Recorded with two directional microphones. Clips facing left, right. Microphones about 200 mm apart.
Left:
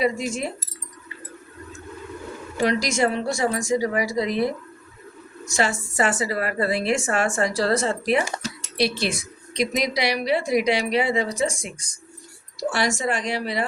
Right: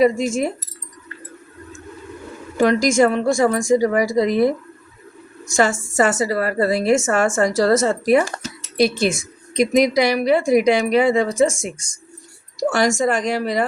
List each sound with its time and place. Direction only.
0.0 s speech: 45° right (ahead or behind)
2.6 s speech: 50° right (ahead or behind)
5.5 s speech: 45° right (ahead or behind)